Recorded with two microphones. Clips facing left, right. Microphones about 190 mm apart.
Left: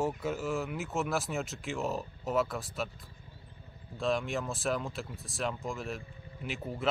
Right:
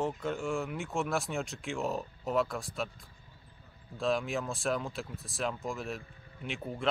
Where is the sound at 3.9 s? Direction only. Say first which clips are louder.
Even; centre (ahead or behind).